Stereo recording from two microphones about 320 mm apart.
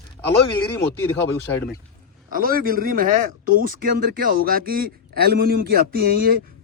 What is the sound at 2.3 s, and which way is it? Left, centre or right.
Speech, right.